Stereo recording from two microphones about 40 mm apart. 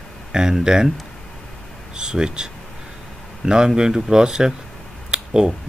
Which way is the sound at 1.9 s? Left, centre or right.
Centre.